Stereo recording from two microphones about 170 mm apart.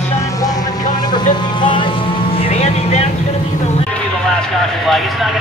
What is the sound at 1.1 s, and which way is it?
Vehicle, 25° left (ahead or behind).